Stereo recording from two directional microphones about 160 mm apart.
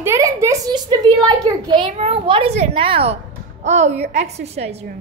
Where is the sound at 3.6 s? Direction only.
45° right (ahead or behind).